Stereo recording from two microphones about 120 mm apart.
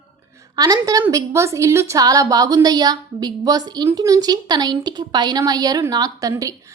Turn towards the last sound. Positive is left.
turn(degrees=-30)  # may be behind; listen again after turning